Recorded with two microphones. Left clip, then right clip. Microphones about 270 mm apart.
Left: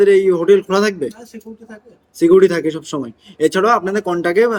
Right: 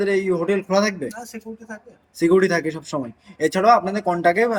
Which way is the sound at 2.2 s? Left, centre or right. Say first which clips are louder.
Left 6 dB; centre.